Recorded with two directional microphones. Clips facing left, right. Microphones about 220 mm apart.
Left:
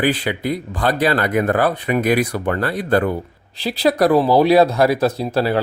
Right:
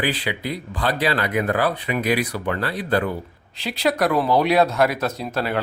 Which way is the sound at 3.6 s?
35° left (ahead or behind).